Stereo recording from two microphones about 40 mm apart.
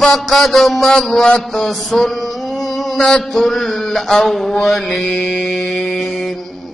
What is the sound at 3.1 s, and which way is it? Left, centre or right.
Mantra, centre.